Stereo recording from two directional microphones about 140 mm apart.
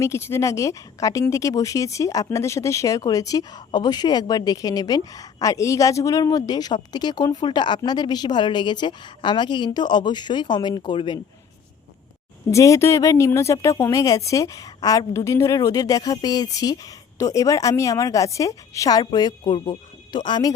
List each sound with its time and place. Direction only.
0.0 s a woman's voice: 20° left (ahead or behind)
12.5 s a woman's voice: 20° left (ahead or behind)